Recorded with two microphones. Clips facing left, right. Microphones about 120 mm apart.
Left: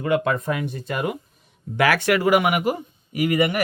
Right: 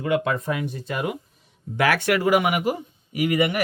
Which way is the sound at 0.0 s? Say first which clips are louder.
Left 2 dB; 50° left (ahead or behind).